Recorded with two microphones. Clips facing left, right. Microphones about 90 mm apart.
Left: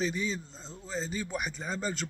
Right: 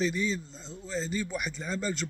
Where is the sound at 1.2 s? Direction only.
25° left (ahead or behind).